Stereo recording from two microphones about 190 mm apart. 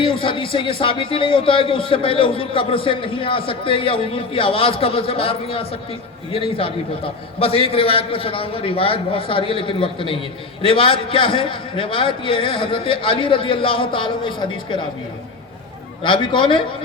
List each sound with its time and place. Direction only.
0.0 s a man's voice: 25° left (ahead or behind)
16.0 s a man's voice: 25° left (ahead or behind)